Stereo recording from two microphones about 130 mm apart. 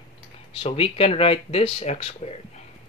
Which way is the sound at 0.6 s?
45° left (ahead or behind).